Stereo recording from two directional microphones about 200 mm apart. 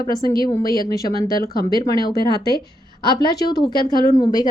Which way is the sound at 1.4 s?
50° left (ahead or behind).